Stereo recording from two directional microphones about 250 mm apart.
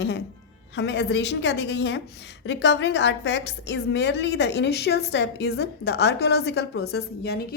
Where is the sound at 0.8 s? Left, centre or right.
Left.